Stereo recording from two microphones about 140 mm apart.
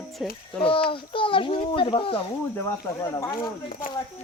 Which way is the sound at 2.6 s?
20° left (ahead or behind).